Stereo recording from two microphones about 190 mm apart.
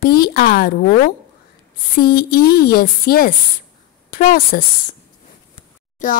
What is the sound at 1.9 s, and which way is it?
Speech, 50° left (ahead or behind).